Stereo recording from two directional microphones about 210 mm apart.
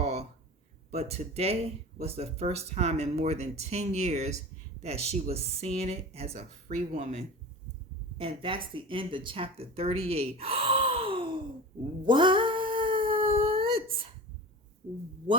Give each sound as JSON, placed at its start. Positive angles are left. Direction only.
{"t": 0.0, "sound": "a sound", "side_deg": -30}
{"t": 0.9, "sound": "speech", "side_deg": -30}
{"t": 12.0, "sound": "cat", "side_deg": -20}